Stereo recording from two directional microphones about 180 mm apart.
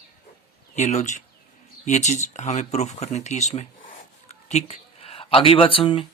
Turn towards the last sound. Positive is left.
turn(degrees=30)  # may be behind; listen again after turning